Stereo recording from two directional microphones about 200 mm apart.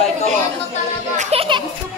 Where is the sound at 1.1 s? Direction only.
30° right (ahead or behind).